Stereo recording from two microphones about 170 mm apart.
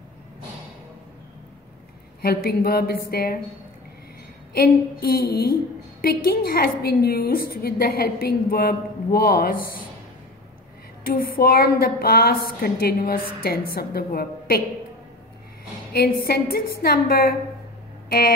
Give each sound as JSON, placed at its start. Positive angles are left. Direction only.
{"t": 2.2, "sound": "a woman's voice", "side_deg": 65}
{"t": 4.6, "sound": "a woman's voice", "side_deg": 60}
{"t": 11.1, "sound": "a woman's voice", "side_deg": 60}
{"t": 15.9, "sound": "a woman's voice", "side_deg": 70}